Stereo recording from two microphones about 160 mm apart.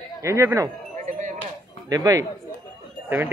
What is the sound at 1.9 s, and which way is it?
Speech, 20° right (ahead or behind).